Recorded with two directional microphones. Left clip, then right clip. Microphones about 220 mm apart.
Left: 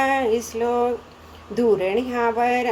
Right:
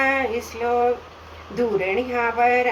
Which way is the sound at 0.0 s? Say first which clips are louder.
Left 1 dB; 45° left (ahead or behind).